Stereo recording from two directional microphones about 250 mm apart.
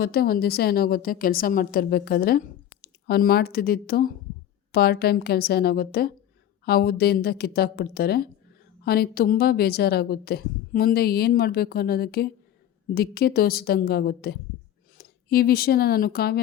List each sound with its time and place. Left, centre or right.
0.0 s a woman's voice: left